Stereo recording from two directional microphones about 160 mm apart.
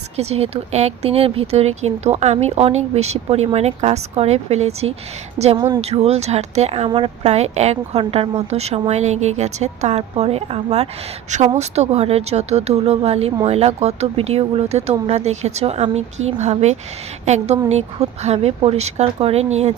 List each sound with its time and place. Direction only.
0.2 s speech: 40° right (ahead or behind)
5.5 s speech: 25° right (ahead or behind)
5.8 s speech: 40° right (ahead or behind)